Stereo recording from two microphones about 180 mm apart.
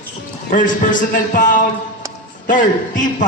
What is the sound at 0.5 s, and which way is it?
Speech, 45° left (ahead or behind).